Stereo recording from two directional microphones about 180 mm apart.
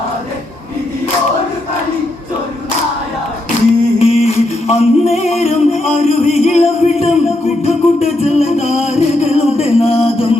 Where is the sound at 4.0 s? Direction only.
35° left (ahead or behind).